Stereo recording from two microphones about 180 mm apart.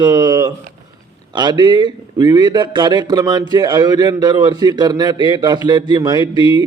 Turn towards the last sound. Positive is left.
turn(degrees=-25)  # may be behind; listen again after turning